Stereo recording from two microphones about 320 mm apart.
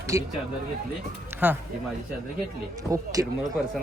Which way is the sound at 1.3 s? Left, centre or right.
Centre.